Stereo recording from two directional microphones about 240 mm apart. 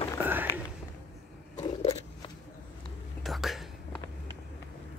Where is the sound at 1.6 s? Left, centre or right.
Left.